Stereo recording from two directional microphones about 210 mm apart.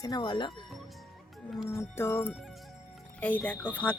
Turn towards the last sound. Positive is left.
turn(degrees=5)  # may be behind; listen again after turning